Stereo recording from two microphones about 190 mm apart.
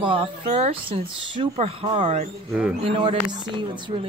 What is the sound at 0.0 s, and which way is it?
Speech, 30° right (ahead or behind).